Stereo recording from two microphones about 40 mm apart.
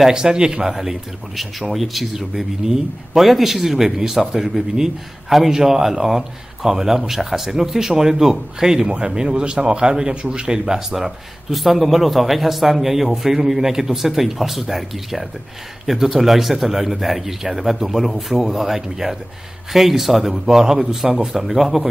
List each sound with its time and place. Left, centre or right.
0.0 s speech: centre
0.7 s speech: centre
10.6 s speech: centre